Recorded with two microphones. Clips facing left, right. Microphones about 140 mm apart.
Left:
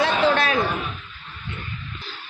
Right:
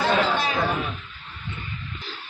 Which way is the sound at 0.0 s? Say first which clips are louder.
Left 2 dB; 90° left.